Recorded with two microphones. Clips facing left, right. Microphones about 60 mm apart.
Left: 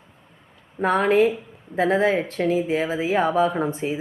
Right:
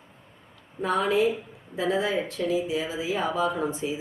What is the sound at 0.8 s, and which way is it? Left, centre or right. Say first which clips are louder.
A woman's voice: left 5 dB; left.